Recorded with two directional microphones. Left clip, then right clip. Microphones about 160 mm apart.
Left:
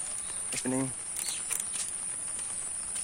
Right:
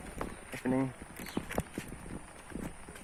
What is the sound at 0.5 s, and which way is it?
Speech, 15° left (ahead or behind).